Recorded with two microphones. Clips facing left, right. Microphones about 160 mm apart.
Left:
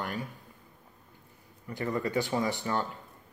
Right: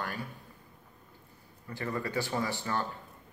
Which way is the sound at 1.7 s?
20° left (ahead or behind).